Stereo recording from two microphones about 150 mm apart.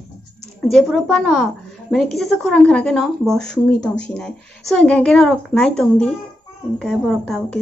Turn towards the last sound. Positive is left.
turn(degrees=5)  # may be behind; listen again after turning